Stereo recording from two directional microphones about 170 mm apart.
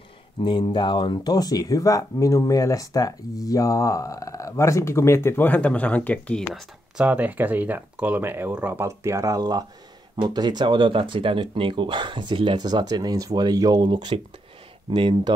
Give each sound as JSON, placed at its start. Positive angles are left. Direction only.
{"t": 0.4, "sound": "speech", "side_deg": 25}
{"t": 7.0, "sound": "speech", "side_deg": -10}